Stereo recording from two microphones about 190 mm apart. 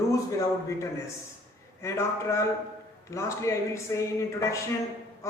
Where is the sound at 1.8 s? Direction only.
15° left (ahead or behind).